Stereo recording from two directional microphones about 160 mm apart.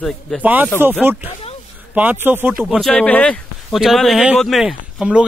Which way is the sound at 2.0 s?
10° right (ahead or behind).